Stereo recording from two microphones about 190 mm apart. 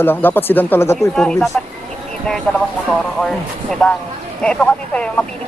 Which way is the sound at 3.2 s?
5° left (ahead or behind).